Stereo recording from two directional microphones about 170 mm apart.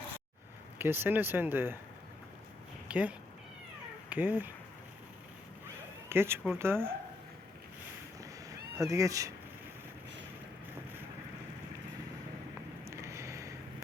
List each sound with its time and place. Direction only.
0.8 s speech: 15° right (ahead or behind)
2.9 s speech: 10° right (ahead or behind)
6.1 s speech: 15° right (ahead or behind)
8.2 s cat: 20° right (ahead or behind)
12.8 s a sound: 20° right (ahead or behind)